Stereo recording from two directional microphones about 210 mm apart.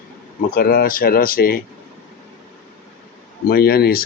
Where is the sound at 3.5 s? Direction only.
45° left (ahead or behind).